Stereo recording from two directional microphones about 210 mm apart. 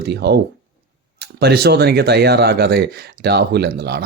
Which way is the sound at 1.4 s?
50° right (ahead or behind).